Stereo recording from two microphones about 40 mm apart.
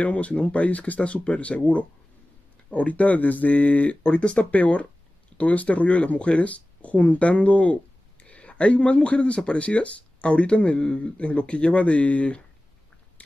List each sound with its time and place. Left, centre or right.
0.0 s speech: left
4.0 s speech: left